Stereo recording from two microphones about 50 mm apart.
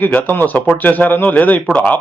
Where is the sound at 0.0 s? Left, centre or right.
Left.